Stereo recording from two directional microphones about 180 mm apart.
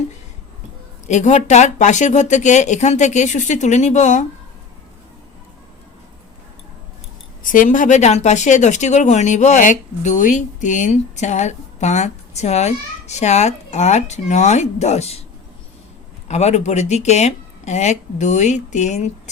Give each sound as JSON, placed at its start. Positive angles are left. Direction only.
{"t": 1.0, "sound": "speech", "side_deg": 40}
{"t": 7.5, "sound": "speech", "side_deg": 45}
{"t": 16.3, "sound": "speech", "side_deg": 40}